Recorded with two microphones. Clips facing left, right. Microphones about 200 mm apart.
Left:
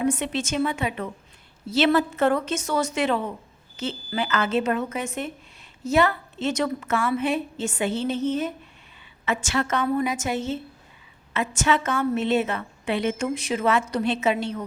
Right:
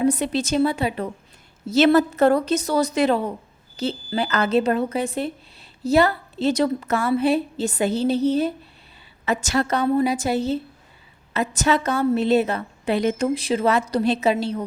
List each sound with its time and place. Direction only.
0.0 s a woman's voice: 35° right (ahead or behind)